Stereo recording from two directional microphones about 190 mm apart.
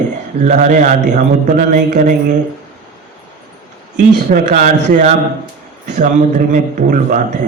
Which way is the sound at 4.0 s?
40° right (ahead or behind).